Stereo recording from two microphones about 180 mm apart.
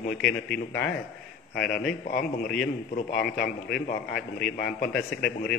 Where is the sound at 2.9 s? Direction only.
60° left (ahead or behind).